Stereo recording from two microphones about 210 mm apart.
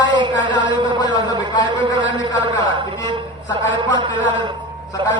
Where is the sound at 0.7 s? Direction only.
20° right (ahead or behind).